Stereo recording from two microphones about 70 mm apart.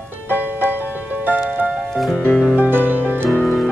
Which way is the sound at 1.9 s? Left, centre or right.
Centre.